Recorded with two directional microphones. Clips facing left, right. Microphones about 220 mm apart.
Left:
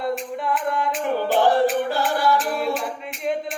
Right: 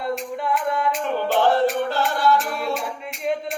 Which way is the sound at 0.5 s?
Centre (ahead or behind).